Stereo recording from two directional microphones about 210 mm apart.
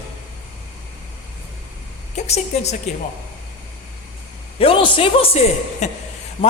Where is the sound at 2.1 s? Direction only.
30° left (ahead or behind).